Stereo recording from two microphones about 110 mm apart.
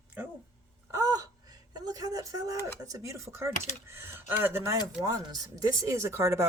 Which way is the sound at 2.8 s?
30° right (ahead or behind).